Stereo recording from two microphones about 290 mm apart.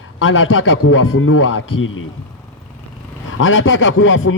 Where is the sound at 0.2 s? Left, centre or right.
Left.